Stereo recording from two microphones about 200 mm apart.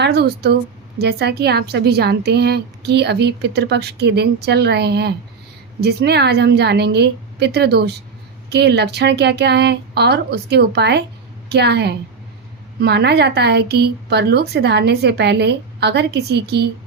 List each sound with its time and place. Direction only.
0.0 s a woman's voice: 55° right (ahead or behind)